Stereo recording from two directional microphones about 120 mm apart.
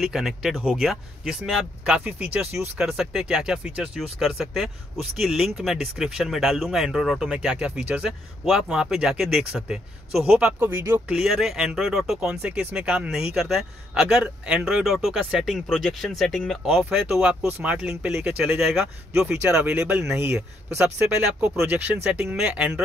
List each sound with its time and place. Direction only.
0.0 s speech: 5° right (ahead or behind)
10.6 s speech: 20° right (ahead or behind)
11.1 s speech: 5° right (ahead or behind)
16.6 s speech: 10° right (ahead or behind)